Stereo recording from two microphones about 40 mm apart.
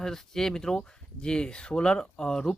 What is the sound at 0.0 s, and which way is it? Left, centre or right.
Speech, centre.